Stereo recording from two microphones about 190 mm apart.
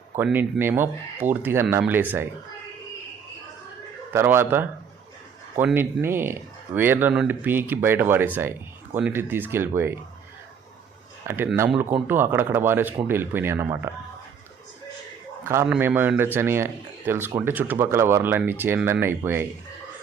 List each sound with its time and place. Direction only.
0.2 s speech: 5° right (ahead or behind)
4.1 s speech: 10° right (ahead or behind)
11.3 s speech: 10° right (ahead or behind)
15.4 s speech: 10° right (ahead or behind)